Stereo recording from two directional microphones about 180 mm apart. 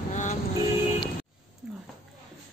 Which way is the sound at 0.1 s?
45° left (ahead or behind).